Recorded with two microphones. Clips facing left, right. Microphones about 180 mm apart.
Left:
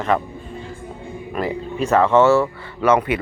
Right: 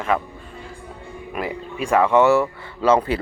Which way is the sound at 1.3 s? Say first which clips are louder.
Left 4 dB; 10° right (ahead or behind).